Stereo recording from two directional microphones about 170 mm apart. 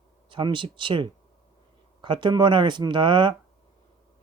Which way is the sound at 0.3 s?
30° right (ahead or behind).